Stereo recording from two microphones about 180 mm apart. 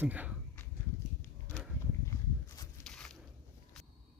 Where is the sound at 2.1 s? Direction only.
20° left (ahead or behind).